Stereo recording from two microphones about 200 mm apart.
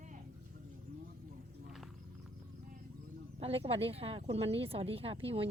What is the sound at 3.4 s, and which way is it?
Speech, 30° right (ahead or behind).